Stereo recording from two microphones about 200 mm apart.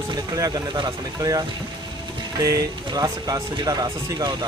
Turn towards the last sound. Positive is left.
turn(degrees=-20)  # may be behind; listen again after turning